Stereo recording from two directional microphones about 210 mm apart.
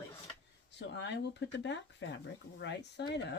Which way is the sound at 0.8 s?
55° left (ahead or behind).